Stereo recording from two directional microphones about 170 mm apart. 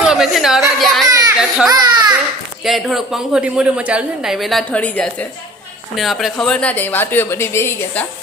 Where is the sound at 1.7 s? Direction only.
25° right (ahead or behind).